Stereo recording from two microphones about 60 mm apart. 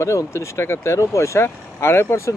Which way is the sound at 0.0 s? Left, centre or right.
Left.